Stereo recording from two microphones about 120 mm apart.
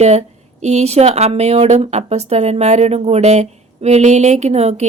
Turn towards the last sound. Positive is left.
turn(degrees=-65)  # may be behind; listen again after turning